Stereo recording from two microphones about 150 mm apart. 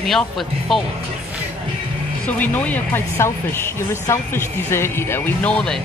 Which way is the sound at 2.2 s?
10° left (ahead or behind).